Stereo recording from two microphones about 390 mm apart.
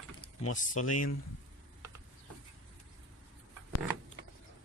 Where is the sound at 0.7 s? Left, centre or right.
Left.